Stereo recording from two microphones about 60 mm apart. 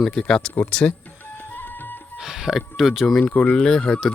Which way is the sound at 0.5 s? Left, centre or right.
Left.